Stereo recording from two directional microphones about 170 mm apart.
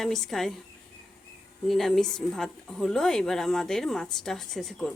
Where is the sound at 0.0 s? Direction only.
5° left (ahead or behind).